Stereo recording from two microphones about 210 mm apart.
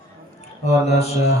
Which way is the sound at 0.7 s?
30° left (ahead or behind).